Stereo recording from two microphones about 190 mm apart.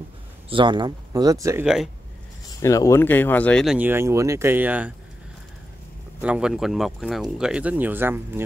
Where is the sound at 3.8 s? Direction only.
10° right (ahead or behind).